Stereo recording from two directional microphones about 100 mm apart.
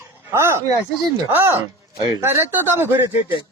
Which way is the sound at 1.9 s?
45° right (ahead or behind).